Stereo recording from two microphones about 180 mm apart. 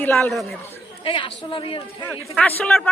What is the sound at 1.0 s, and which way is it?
Speech, 30° left (ahead or behind).